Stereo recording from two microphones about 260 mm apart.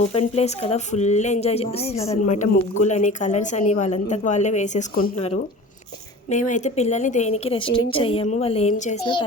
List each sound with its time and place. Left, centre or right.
0.0 s speech: left